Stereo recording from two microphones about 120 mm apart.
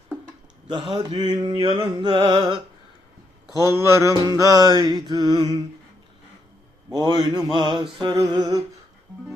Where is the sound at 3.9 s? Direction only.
30° right (ahead or behind).